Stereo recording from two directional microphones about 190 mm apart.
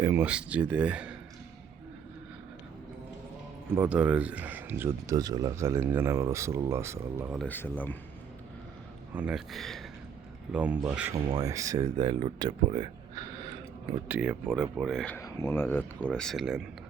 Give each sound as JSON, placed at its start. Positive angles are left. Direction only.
{"t": 0.0, "sound": "speech", "side_deg": -10}
{"t": 3.8, "sound": "speech", "side_deg": -5}
{"t": 7.3, "sound": "speech", "side_deg": 10}
{"t": 9.1, "sound": "speech", "side_deg": -5}
{"t": 11.1, "sound": "speech", "side_deg": -20}
{"t": 14.1, "sound": "speech", "side_deg": -5}
{"t": 15.1, "sound": "speech", "side_deg": 15}